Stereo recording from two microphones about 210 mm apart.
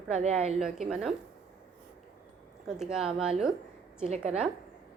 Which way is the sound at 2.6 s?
Centre (ahead or behind).